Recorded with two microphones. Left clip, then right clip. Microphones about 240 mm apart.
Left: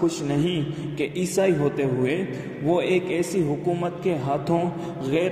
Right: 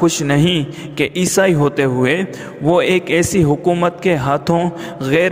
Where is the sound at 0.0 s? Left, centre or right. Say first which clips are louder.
Right 9 dB; right.